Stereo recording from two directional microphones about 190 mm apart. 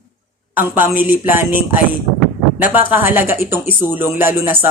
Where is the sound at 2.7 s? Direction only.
10° right (ahead or behind).